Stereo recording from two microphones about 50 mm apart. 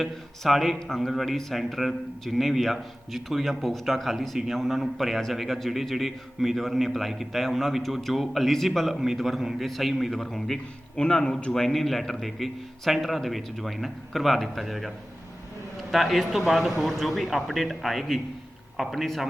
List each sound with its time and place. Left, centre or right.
0.0 s a man's voice: centre; by 11.5 s left
11.5 s a man's voice: centre